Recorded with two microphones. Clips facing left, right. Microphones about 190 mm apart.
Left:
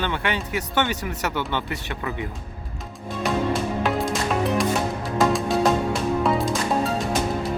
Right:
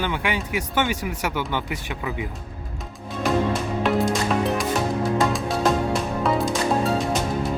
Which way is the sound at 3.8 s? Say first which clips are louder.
Right 2 dB; centre (ahead or behind).